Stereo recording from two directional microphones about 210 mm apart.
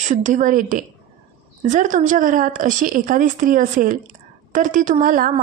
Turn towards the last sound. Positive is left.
turn(degrees=-40)  # may be behind; listen again after turning